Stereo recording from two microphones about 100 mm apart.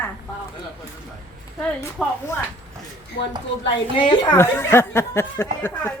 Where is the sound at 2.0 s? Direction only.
5° right (ahead or behind).